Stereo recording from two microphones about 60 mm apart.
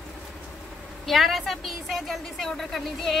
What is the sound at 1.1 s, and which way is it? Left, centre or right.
A woman's voice, centre.